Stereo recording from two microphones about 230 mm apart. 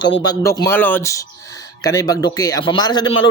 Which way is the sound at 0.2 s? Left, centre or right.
Centre.